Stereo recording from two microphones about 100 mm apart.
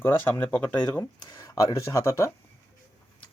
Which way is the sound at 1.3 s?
35° left (ahead or behind).